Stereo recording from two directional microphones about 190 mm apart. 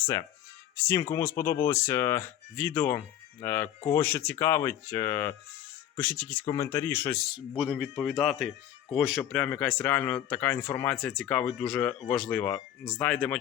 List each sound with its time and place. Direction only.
0.0 s speech: 15° left (ahead or behind)
7.5 s speech: 5° right (ahead or behind)